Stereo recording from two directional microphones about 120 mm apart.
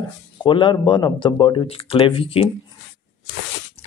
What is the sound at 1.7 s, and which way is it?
Speech, 50° left (ahead or behind).